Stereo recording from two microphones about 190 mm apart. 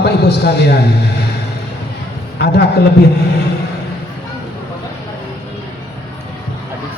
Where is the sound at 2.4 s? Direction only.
60° left (ahead or behind).